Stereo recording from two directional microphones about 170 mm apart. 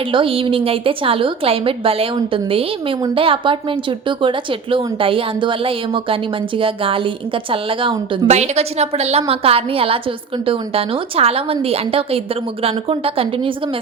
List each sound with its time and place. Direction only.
0.1 s a woman's voice: 30° right (ahead or behind)
8.3 s a woman's voice: 40° right (ahead or behind)